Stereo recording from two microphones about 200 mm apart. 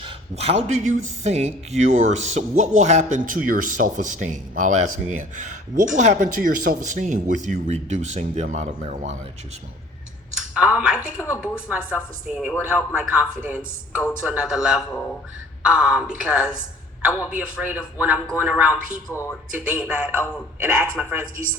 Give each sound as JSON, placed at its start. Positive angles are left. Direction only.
{"t": 0.0, "sound": "a man's voice", "side_deg": -30}
{"t": 10.5, "sound": "a man's voice", "side_deg": -5}
{"t": 19.1, "sound": "speech", "side_deg": 15}
{"t": 19.5, "sound": "a man's voice", "side_deg": -5}